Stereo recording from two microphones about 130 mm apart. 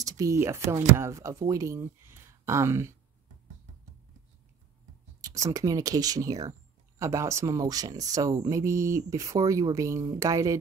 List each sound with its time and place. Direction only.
0.0 s speech: 25° right (ahead or behind)
5.2 s speech: 25° right (ahead or behind)